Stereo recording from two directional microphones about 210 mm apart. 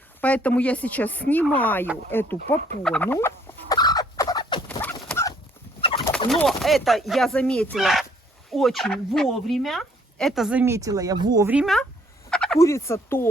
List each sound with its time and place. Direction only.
0.2 s speech: 5° left (ahead or behind)
2.8 s turkey: 5° left (ahead or behind)
4.8 s a sound: 10° left (ahead or behind)
5.8 s bird: 10° left (ahead or behind)
6.4 s speech: centre (ahead or behind); by 11.5 s 15° right (ahead or behind)
11.5 s speech: centre (ahead or behind)
12.3 s frog: 5° left (ahead or behind)
12.5 s speech: 15° left (ahead or behind)